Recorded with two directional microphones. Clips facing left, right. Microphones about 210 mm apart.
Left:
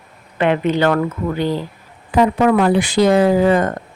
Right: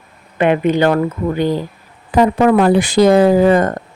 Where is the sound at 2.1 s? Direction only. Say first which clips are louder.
Right 2 dB; 35° right (ahead or behind).